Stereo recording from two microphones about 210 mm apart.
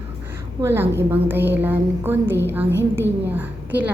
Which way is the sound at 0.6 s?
10° right (ahead or behind).